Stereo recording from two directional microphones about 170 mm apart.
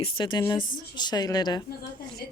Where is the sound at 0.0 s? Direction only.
25° left (ahead or behind).